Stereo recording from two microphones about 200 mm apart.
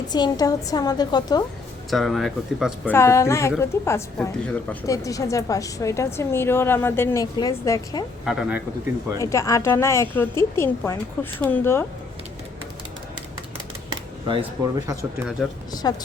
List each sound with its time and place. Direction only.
0.1 s a woman's voice: 20° left (ahead or behind)
1.9 s speech: centre (ahead or behind)
2.9 s a woman's voice: 15° left (ahead or behind)
8.2 s speech: 5° right (ahead or behind)
9.1 s a woman's voice: 15° left (ahead or behind)
14.3 s speech: 20° right (ahead or behind)
15.7 s a woman's voice: 20° left (ahead or behind)